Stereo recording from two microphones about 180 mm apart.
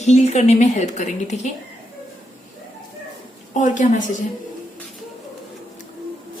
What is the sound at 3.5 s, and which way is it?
Speech, 45° left (ahead or behind).